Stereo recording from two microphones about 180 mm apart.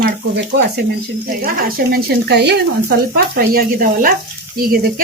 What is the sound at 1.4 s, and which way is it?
Speech, 55° right (ahead or behind).